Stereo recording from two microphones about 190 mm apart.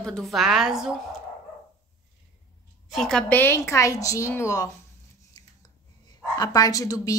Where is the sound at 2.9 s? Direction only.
Centre (ahead or behind).